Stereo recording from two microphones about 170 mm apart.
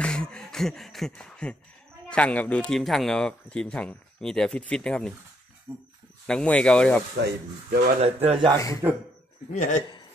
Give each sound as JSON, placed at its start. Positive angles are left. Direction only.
{"t": 0.0, "sound": "music", "side_deg": 5}
{"t": 2.0, "sound": "speech", "side_deg": 5}
{"t": 5.7, "sound": "speech", "side_deg": -15}
{"t": 6.2, "sound": "speech", "side_deg": 5}
{"t": 7.2, "sound": "speech", "side_deg": -70}
{"t": 8.0, "sound": "speech", "side_deg": -35}
{"t": 8.8, "sound": "speech", "side_deg": -15}
{"t": 9.5, "sound": "a man's voice", "side_deg": 50}